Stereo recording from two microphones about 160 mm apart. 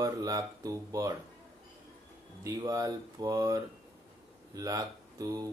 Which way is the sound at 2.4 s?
25° right (ahead or behind).